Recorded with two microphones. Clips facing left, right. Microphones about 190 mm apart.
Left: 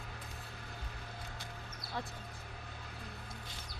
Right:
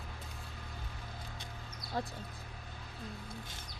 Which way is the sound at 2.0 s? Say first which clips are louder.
Right 4 dB; 40° right (ahead or behind).